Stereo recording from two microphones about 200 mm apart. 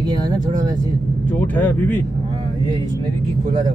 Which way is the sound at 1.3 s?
10° left (ahead or behind).